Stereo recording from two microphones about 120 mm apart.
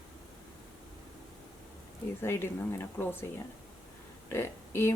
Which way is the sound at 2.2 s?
20° left (ahead or behind).